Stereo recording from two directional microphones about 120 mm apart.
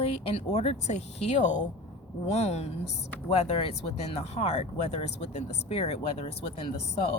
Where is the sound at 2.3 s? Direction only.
65° left (ahead or behind).